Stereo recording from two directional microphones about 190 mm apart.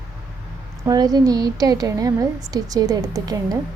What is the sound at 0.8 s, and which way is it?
A woman's voice, 20° right (ahead or behind).